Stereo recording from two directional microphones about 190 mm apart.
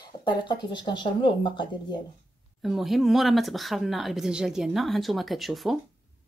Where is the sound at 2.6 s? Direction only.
Centre (ahead or behind).